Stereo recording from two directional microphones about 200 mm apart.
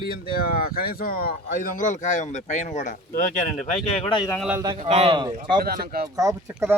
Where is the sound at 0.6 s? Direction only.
50° left (ahead or behind).